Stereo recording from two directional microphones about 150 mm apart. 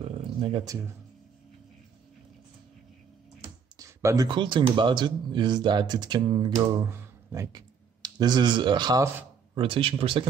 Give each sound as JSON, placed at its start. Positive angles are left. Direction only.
{"t": 0.4, "sound": "speech", "side_deg": -35}
{"t": 3.7, "sound": "computer keyboard", "side_deg": -20}
{"t": 4.3, "sound": "speech", "side_deg": -30}